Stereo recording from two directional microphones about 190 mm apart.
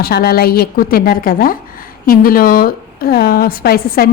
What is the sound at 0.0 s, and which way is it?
Speech, 55° left (ahead or behind).